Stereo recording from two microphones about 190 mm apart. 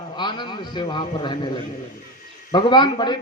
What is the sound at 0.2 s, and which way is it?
A man's voice, 25° left (ahead or behind).